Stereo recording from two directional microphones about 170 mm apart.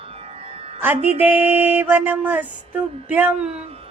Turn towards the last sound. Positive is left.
turn(degrees=-35)  # may be behind; listen again after turning